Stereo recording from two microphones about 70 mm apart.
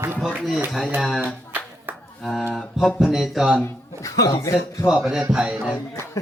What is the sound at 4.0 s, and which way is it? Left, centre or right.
Speech, left.